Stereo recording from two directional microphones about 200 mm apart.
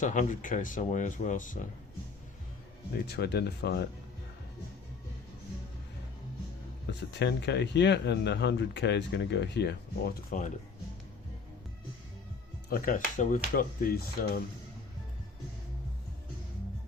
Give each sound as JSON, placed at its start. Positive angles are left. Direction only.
{"t": 0.0, "sound": "speech", "side_deg": 40}
{"t": 3.1, "sound": "speech", "side_deg": 55}
{"t": 7.1, "sound": "speech", "side_deg": 60}
{"t": 10.2, "sound": "speech", "side_deg": 40}
{"t": 12.6, "sound": "speech", "side_deg": 45}